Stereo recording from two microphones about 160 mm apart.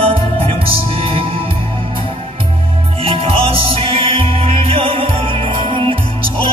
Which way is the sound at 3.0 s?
35° right (ahead or behind).